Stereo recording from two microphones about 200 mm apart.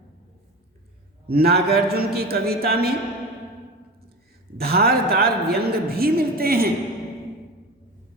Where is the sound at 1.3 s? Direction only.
50° right (ahead or behind).